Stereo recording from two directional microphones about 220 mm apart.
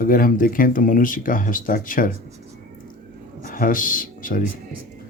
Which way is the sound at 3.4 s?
40° left (ahead or behind).